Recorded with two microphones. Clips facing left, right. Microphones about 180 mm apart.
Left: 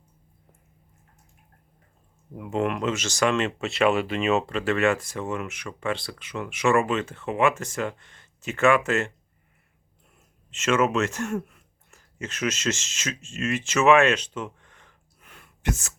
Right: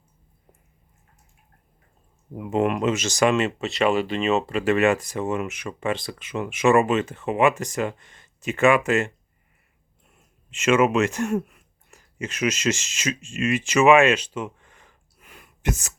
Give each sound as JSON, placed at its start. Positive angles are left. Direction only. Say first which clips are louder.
{"t": 2.3, "sound": "speech", "louder": "right 4 dB", "side_deg": -15}
{"t": 3.3, "sound": "speech", "louder": "right 2 dB", "side_deg": -5}
{"t": 4.5, "sound": "speech", "louder": "right 3 dB", "side_deg": -15}
{"t": 10.5, "sound": "speech", "louder": "right 3 dB", "side_deg": -15}